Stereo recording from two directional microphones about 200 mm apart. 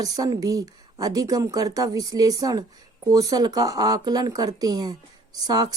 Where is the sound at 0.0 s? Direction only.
20° right (ahead or behind).